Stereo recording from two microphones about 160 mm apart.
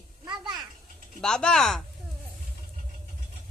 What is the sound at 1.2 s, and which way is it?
Speech, 5° left (ahead or behind).